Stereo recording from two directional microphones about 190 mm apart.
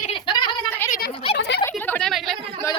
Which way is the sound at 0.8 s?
10° left (ahead or behind).